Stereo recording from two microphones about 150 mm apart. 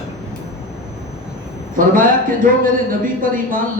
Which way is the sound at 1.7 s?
65° right (ahead or behind).